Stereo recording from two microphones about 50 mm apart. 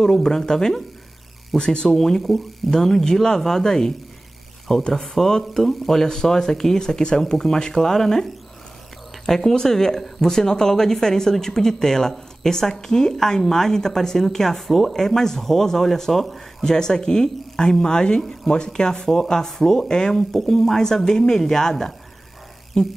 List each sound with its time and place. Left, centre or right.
0.0 s speech: centre